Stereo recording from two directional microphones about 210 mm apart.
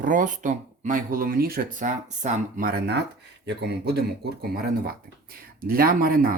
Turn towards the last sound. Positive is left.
turn(degrees=-45)  # may be behind; listen again after turning